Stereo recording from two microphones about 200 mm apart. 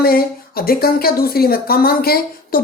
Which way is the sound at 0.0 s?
50° left (ahead or behind).